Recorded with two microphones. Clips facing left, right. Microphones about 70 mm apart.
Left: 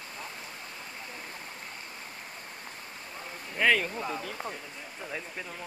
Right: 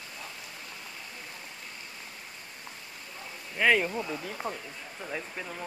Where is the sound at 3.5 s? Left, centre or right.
Centre.